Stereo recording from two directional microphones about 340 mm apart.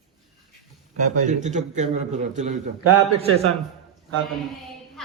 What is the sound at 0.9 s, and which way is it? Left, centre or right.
A man's voice, right.